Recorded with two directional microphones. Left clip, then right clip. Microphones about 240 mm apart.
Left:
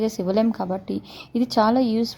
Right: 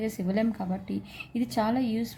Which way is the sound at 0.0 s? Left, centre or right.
Left.